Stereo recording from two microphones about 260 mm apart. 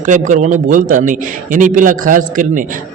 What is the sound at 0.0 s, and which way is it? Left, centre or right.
A man's voice, right.